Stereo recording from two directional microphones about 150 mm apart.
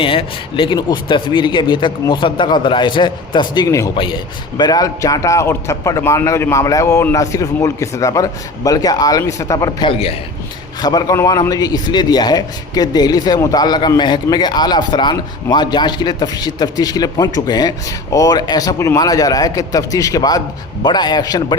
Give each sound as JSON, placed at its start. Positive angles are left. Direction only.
{"t": 0.0, "sound": "speech", "side_deg": 35}
{"t": 3.9, "sound": "a man's voice", "side_deg": 35}
{"t": 9.9, "sound": "speech", "side_deg": 40}
{"t": 10.8, "sound": "a man's voice", "side_deg": 25}